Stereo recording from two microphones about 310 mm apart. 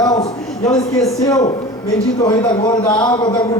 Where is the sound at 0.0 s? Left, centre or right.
Centre.